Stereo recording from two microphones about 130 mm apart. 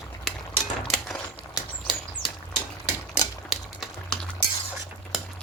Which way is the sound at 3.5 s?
Centre (ahead or behind).